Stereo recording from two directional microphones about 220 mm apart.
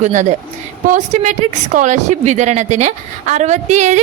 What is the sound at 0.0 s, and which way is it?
A woman's voice, 35° right (ahead or behind).